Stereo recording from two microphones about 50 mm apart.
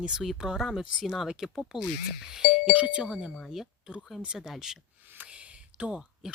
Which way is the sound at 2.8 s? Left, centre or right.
Right.